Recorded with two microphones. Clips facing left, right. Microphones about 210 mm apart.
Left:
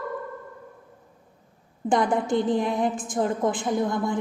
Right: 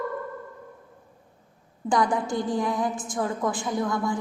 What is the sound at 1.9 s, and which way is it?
A woman's voice, 25° left (ahead or behind).